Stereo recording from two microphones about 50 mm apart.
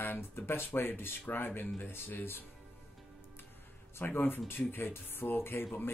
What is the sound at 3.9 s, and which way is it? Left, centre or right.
Speech, left.